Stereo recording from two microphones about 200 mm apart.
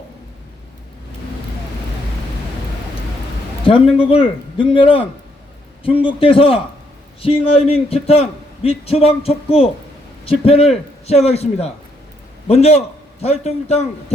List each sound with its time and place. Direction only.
3.6 s a man's voice: 25° left (ahead or behind)